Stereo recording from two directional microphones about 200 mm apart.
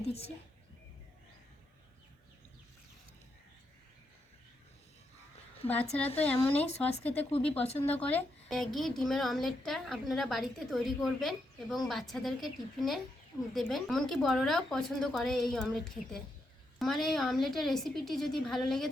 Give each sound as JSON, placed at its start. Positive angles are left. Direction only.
{"t": 0.0, "sound": "speech", "side_deg": 30}
{"t": 5.6, "sound": "speech", "side_deg": 10}
{"t": 7.8, "sound": "a woman's voice", "side_deg": 10}